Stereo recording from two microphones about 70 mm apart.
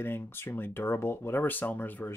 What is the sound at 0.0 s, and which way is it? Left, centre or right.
Speech, left.